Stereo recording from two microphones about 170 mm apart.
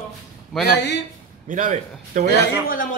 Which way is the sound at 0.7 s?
90° left.